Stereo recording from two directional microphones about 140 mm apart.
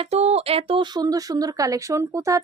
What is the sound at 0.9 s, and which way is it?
Speech, 25° right (ahead or behind).